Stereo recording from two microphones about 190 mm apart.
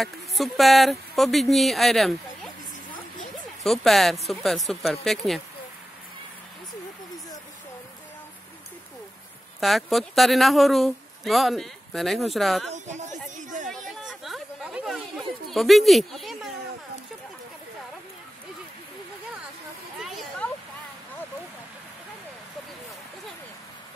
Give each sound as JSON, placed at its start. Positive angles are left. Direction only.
{"t": 0.0, "sound": "speech", "side_deg": 0}
{"t": 3.6, "sound": "speech", "side_deg": 0}
{"t": 9.6, "sound": "speech", "side_deg": 0}
{"t": 12.7, "sound": "speech", "side_deg": -40}
{"t": 13.7, "sound": "chatter", "side_deg": 0}
{"t": 20.0, "sound": "a sound", "side_deg": 0}